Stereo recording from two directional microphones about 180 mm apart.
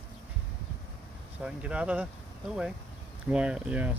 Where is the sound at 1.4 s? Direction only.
5° right (ahead or behind).